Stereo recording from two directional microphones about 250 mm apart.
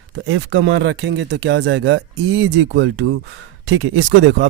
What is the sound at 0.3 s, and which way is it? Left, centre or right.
Speech, right.